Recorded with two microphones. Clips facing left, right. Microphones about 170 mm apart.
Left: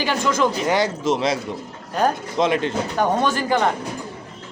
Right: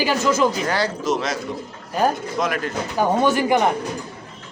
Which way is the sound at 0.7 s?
25° left (ahead or behind).